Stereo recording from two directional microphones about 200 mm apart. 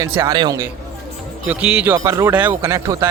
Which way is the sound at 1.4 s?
5° right (ahead or behind).